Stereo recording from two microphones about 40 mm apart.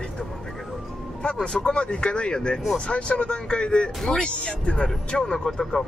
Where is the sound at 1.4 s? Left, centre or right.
Left.